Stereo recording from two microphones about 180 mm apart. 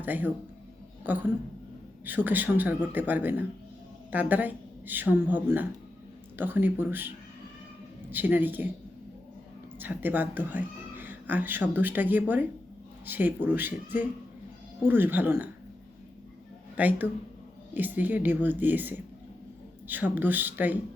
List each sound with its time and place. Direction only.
0.0 s a woman's voice: 10° right (ahead or behind)
8.1 s a woman's voice: 10° right (ahead or behind)
9.7 s a woman's voice: 10° right (ahead or behind)
16.7 s a woman's voice: 10° right (ahead or behind)